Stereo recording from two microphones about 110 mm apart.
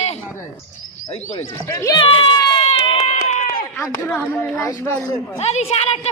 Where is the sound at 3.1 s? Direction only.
90° left.